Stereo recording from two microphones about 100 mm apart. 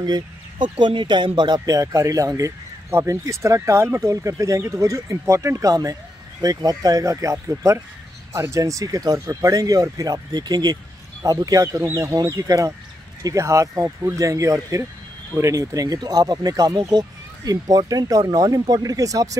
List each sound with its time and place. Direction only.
0.0 s speech: 45° right (ahead or behind)